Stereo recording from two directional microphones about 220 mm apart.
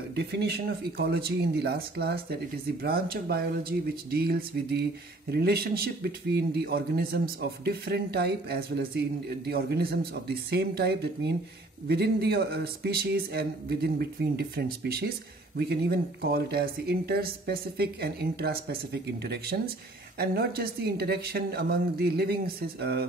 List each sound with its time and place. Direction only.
0.1 s speech: 50° right (ahead or behind)